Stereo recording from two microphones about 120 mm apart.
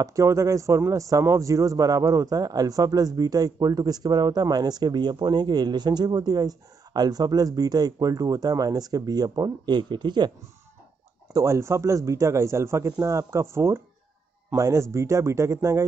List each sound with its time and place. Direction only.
0.0 s speech: 25° right (ahead or behind)
11.3 s speech: 25° right (ahead or behind)